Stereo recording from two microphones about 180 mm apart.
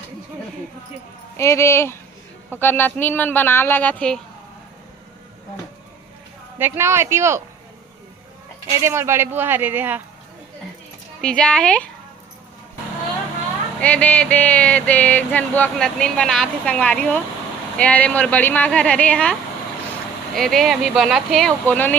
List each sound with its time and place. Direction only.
1.4 s a sound: 15° left (ahead or behind)
6.6 s speech: 15° right (ahead or behind)
8.8 s speech: 15° right (ahead or behind)
11.2 s speech: 5° left (ahead or behind)
13.8 s a sound: 10° left (ahead or behind)
20.3 s speech: centre (ahead or behind)